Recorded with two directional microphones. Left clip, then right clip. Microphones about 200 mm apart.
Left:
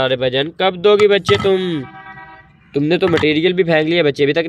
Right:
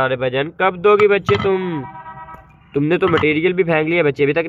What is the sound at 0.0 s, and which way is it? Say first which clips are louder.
Speech: left 2 dB; 20° left (ahead or behind).